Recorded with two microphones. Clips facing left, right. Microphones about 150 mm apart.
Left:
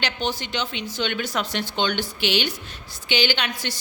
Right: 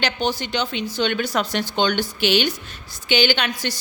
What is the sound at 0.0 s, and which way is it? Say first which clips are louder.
A woman's voice: right 4 dB; 40° right (ahead or behind).